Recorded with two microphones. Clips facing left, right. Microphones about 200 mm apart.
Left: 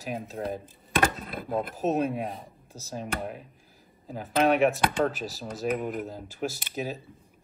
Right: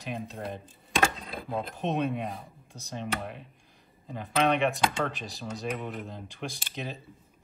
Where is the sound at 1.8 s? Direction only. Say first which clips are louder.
Left 2 dB; 5° left (ahead or behind).